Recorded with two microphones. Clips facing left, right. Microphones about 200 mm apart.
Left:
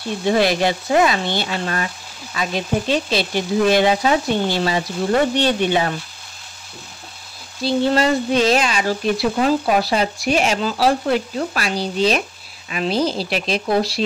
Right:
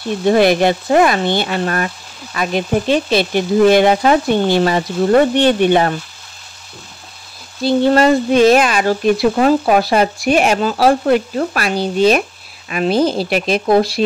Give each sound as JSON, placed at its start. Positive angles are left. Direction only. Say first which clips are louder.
{"t": 0.2, "sound": "speech", "louder": "right 5 dB", "side_deg": -55}
{"t": 7.6, "sound": "speech", "louder": "right 5 dB", "side_deg": -55}